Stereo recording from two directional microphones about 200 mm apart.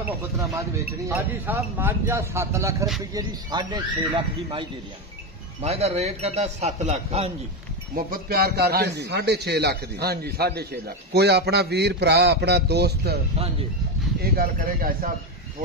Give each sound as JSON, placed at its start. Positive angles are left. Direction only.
{"t": 1.0, "sound": "a man's voice", "side_deg": -10}
{"t": 7.9, "sound": "a man's voice", "side_deg": -50}
{"t": 14.2, "sound": "a man's voice", "side_deg": -50}